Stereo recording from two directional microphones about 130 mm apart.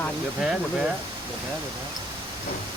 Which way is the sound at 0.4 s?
5° right (ahead or behind).